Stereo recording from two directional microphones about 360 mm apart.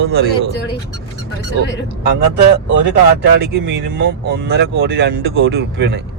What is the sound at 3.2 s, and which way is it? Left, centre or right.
Speech, right.